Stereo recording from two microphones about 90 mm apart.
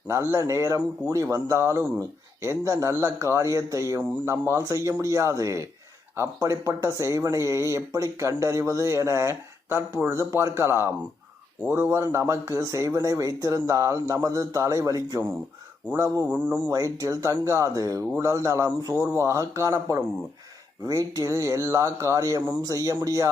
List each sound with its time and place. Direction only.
0.1 s a man's voice: 30° right (ahead or behind)
16.2 s a man's voice: 20° right (ahead or behind)
16.6 s speech: 35° right (ahead or behind)